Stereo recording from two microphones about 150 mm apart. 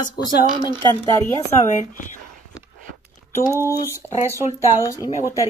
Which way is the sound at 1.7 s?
55° left (ahead or behind).